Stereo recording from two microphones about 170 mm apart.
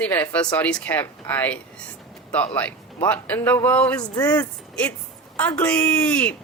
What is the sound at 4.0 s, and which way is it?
Speech, 20° left (ahead or behind).